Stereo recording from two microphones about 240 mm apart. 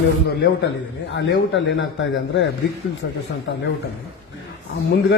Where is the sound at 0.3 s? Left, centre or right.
Left.